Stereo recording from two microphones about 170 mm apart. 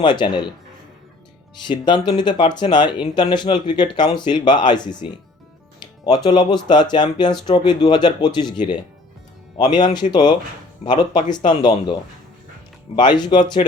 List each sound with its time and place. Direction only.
0.0 s speech: 25° left (ahead or behind)
1.6 s speech: 25° left (ahead or behind)
6.2 s speech: 25° left (ahead or behind)
13.0 s speech: 25° left (ahead or behind)